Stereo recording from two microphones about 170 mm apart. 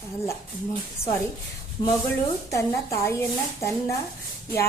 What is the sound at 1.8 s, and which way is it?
Speech, 25° left (ahead or behind).